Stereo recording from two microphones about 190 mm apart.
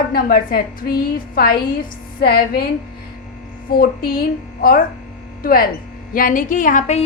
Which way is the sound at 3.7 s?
50° left (ahead or behind).